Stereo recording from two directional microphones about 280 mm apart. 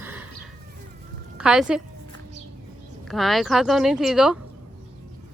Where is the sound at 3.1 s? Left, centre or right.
Centre.